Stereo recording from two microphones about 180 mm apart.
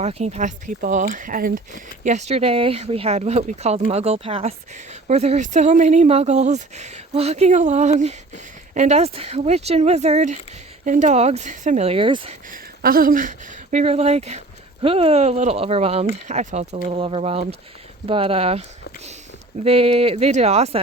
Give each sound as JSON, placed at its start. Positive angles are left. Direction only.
{"t": 0.0, "sound": "speech", "side_deg": -40}
{"t": 12.5, "sound": "speech", "side_deg": -55}
{"t": 19.6, "sound": "speech", "side_deg": -35}